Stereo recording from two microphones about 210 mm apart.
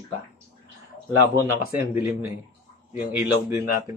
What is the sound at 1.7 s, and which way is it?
Speech, 10° right (ahead or behind).